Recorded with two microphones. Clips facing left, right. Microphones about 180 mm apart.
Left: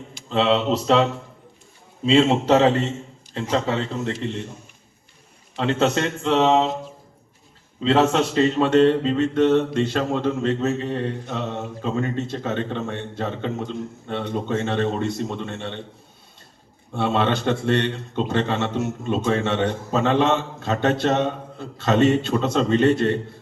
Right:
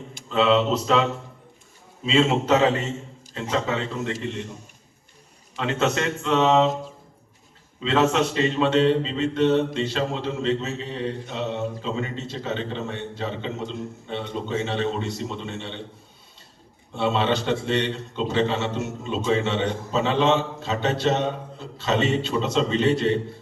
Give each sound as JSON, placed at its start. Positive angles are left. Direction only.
{"t": 0.3, "sound": "speech", "side_deg": 30}
{"t": 2.0, "sound": "speech", "side_deg": 30}
{"t": 5.5, "sound": "speech", "side_deg": 35}
{"t": 7.8, "sound": "a man's voice", "side_deg": 35}
{"t": 16.9, "sound": "a man's voice", "side_deg": 55}